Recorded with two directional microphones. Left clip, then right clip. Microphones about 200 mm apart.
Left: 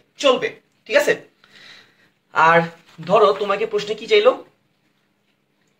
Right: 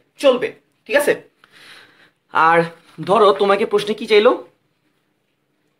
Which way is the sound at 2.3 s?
50° right (ahead or behind).